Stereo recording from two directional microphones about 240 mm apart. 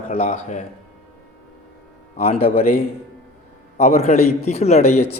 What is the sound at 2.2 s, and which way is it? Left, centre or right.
Speech, left.